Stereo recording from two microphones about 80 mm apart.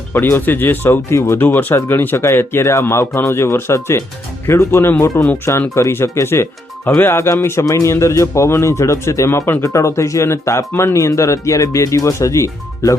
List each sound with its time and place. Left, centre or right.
0.1 s speech: left
7.6 s speech: left